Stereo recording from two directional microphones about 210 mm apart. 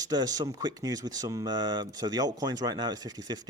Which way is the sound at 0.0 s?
20° right (ahead or behind).